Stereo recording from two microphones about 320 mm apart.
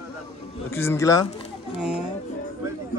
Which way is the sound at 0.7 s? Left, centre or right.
Centre.